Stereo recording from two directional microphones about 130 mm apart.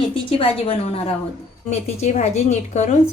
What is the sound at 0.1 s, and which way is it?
A woman's voice, 45° left (ahead or behind).